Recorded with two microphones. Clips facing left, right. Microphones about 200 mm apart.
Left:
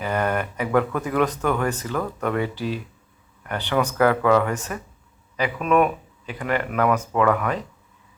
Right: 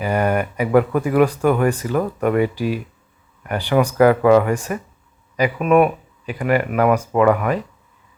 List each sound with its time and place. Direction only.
0.0 s speech: 10° right (ahead or behind)